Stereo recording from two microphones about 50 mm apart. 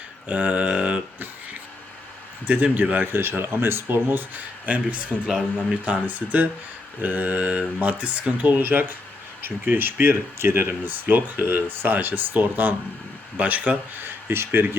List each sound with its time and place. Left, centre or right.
0.3 s a sound: right
2.5 s mantra: right
3.1 s speech: right
5.8 s mantra: right
9.6 s speech: right
13.3 s mantra: right
14.0 s speech: right